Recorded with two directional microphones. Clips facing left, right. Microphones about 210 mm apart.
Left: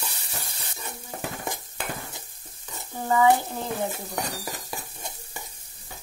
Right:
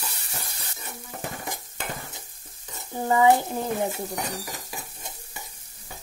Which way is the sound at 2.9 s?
15° right (ahead or behind).